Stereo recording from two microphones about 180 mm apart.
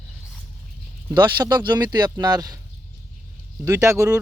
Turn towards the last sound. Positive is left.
turn(degrees=-15)  # may be behind; listen again after turning